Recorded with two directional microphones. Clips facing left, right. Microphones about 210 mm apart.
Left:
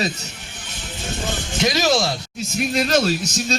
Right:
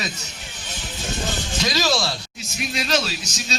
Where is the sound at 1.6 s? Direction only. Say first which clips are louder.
Left 4 dB; 20° left (ahead or behind).